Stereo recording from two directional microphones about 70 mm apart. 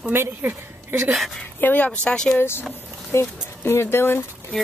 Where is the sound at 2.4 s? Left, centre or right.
Left.